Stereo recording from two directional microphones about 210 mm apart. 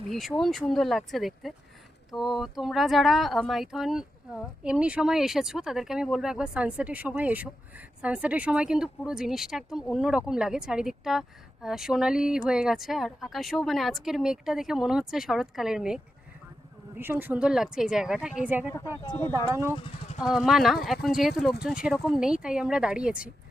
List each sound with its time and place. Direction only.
0.1 s speech: centre (ahead or behind)
17.0 s speech: 10° right (ahead or behind)
19.0 s speech: 20° left (ahead or behind)
19.3 s speech: 15° right (ahead or behind)
19.7 s speech: 25° left (ahead or behind)
20.1 s speech: centre (ahead or behind)